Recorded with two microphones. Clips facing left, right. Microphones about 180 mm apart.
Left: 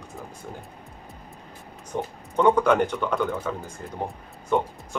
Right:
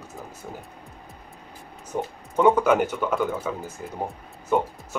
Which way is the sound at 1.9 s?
5° right (ahead or behind).